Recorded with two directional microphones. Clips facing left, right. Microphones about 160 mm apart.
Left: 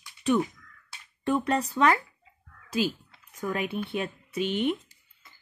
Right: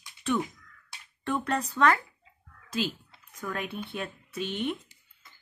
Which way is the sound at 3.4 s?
15° left (ahead or behind).